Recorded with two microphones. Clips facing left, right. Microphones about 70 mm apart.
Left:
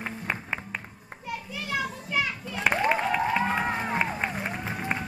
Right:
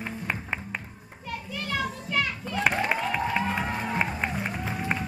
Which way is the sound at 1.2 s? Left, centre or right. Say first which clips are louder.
Right 1 dB; centre.